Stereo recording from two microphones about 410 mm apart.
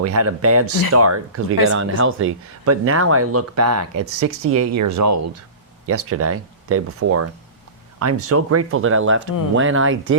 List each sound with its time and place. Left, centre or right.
0.0 s speech: right